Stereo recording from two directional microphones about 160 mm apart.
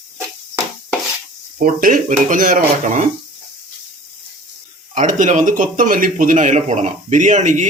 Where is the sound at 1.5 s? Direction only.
55° right (ahead or behind).